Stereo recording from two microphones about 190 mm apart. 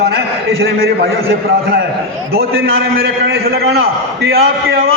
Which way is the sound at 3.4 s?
55° right (ahead or behind).